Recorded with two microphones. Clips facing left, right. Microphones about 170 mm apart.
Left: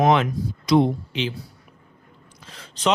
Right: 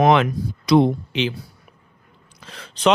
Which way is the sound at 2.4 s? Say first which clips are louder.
Right 5 dB; 70° right (ahead or behind).